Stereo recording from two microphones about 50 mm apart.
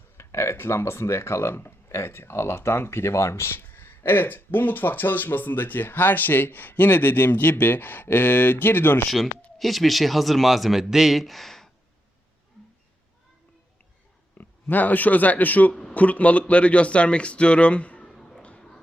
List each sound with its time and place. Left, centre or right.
0.2 s speech: left
9.0 s a man's voice: centre
14.3 s speech: left
15.7 s a man's voice: centre
16.0 s speech: left
18.0 s a sound: centre
18.4 s a sound: centre